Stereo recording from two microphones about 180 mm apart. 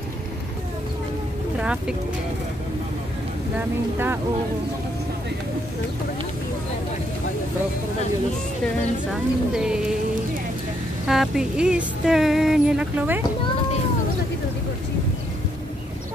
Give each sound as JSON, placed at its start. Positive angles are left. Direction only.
{"t": 1.6, "sound": "music", "side_deg": -5}
{"t": 3.5, "sound": "speech", "side_deg": -10}
{"t": 9.1, "sound": "music", "side_deg": -5}
{"t": 11.1, "sound": "music", "side_deg": 0}